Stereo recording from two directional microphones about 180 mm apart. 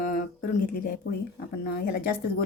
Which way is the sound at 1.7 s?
55° left (ahead or behind).